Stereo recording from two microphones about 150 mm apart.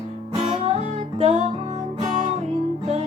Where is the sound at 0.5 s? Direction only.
45° right (ahead or behind).